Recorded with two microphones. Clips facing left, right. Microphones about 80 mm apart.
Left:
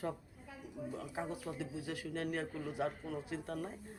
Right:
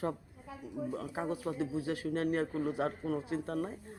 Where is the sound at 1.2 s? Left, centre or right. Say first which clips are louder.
Right 7 dB; right.